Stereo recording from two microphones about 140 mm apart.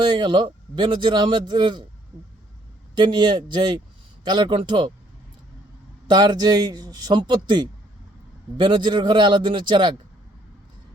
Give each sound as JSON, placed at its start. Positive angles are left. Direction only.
{"t": 0.0, "sound": "a man's voice", "side_deg": -35}
{"t": 2.9, "sound": "a man's voice", "side_deg": -35}
{"t": 6.1, "sound": "a man's voice", "side_deg": -30}